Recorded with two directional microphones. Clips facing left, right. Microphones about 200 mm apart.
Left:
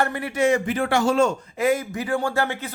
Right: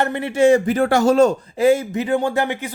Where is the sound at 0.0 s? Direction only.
25° right (ahead or behind).